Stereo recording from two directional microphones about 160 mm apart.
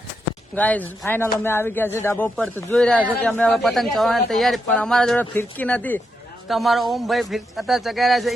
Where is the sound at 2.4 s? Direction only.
5° left (ahead or behind).